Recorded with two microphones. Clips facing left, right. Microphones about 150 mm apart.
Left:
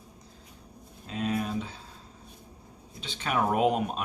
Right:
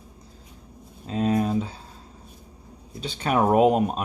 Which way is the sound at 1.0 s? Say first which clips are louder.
Right 7 dB; 35° right (ahead or behind).